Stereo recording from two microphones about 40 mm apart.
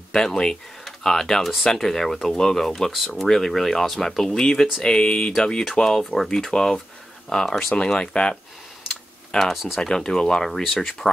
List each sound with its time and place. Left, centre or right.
0.1 s speech: centre
6.0 s speech: centre
6.3 s speech: centre
7.7 s speech: left
9.4 s speech: centre
9.8 s speech: centre